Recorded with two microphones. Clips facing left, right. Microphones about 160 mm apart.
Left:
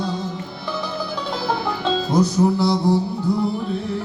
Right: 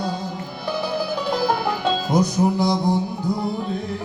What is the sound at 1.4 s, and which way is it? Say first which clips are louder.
Music: left 1 dB; 15° right (ahead or behind).